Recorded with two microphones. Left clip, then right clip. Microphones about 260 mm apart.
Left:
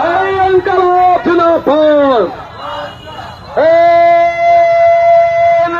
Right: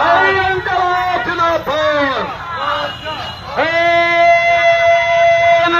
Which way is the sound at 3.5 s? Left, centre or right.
Left.